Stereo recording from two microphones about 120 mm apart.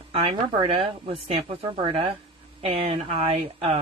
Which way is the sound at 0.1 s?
50° right (ahead or behind).